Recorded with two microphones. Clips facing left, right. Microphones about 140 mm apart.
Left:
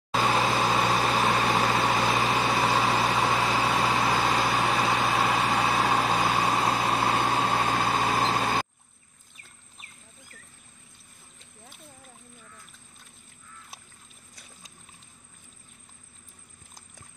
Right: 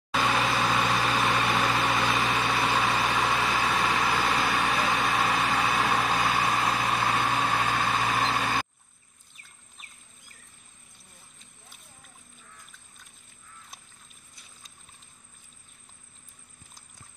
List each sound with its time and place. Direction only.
0.1 s vehicle: 35° left (ahead or behind)